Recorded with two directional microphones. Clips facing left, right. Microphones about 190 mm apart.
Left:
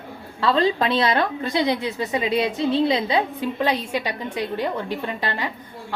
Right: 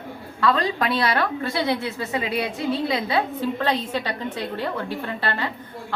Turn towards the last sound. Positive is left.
turn(degrees=15)  # may be behind; listen again after turning